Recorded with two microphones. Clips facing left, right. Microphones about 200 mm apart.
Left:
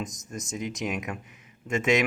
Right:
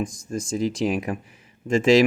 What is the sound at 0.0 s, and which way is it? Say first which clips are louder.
Speech: right 8 dB; 30° right (ahead or behind).